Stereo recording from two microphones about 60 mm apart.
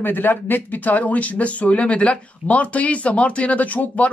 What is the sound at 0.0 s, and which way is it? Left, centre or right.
Speech, left.